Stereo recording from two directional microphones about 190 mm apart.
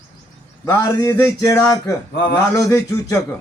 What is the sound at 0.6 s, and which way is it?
A man's voice, 15° left (ahead or behind).